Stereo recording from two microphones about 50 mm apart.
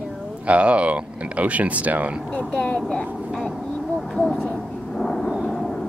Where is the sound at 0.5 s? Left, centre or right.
Right.